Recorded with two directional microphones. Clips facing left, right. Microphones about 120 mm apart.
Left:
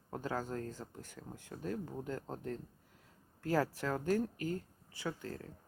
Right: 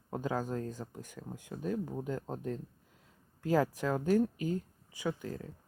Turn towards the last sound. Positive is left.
turn(degrees=-15)  # may be behind; listen again after turning